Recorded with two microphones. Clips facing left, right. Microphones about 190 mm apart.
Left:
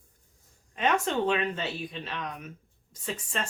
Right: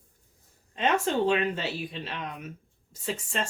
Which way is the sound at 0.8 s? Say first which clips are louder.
Right 1 dB; 30° right (ahead or behind).